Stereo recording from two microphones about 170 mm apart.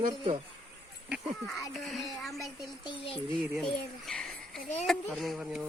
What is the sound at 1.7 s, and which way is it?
Speech, centre (ahead or behind).